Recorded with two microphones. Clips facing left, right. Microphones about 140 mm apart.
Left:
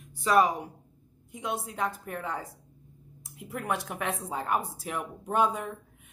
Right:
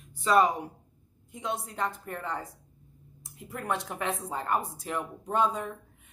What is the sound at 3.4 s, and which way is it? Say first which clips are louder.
A woman's voice: left 1 dB; 5° left (ahead or behind).